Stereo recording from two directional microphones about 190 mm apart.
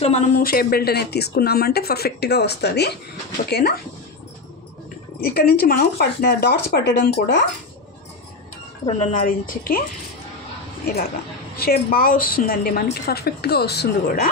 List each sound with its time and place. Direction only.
0.0 s a woman's voice: 35° left (ahead or behind)
0.4 s speech: 50° left (ahead or behind)
5.2 s speech: 55° left (ahead or behind)
8.8 s a woman's voice: 35° left (ahead or behind)
11.5 s a woman's voice: 50° left (ahead or behind)